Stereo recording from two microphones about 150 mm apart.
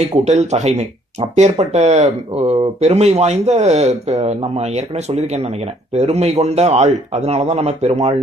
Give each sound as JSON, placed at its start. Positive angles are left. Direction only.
{"t": 0.3, "sound": "speech", "side_deg": -50}